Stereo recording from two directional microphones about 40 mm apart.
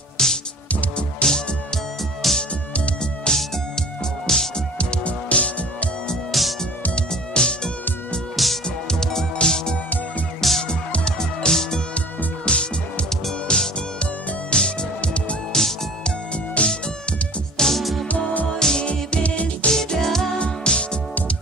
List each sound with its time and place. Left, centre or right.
0.2 s music: centre
2.2 s music: centre
4.7 s music: left
6.3 s music: centre
7.1 s music: centre
10.4 s music: centre
11.1 s music: centre
15.5 s music: centre
16.6 s music: left
17.6 s music: centre
18.6 s music: centre
18.9 s music: left
19.7 s music: centre
20.3 s music: left